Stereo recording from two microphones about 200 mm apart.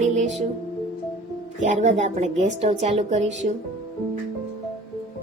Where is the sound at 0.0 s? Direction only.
35° right (ahead or behind).